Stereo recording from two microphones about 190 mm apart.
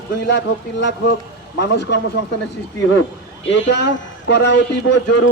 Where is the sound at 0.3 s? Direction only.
65° left (ahead or behind).